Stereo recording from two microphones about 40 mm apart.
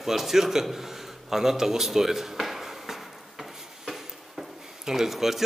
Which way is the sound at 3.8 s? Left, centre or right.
Centre.